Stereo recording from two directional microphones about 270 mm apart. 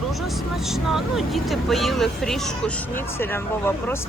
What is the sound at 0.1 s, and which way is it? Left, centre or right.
Speech, centre.